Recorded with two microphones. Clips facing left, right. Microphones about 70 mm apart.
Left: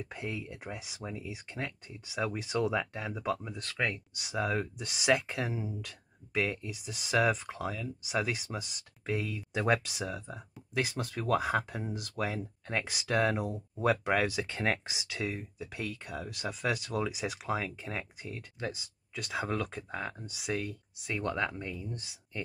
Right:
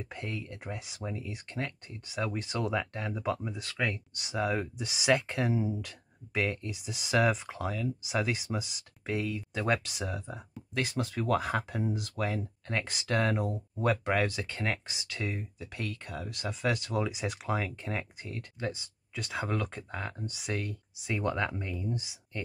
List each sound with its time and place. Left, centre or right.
0.0 s speech: centre
14.4 s speech: left
15.2 s speech: centre